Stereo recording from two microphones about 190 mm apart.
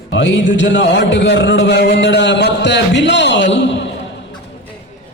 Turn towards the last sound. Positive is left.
turn(degrees=70)  # may be behind; listen again after turning